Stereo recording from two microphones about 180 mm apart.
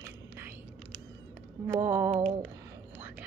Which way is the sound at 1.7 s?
15° right (ahead or behind).